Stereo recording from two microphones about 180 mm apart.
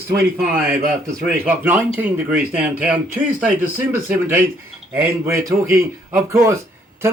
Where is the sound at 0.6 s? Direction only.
55° right (ahead or behind).